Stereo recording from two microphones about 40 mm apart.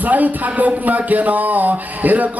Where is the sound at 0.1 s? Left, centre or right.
Right.